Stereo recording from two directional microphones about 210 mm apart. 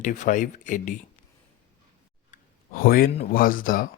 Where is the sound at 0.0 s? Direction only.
35° left (ahead or behind).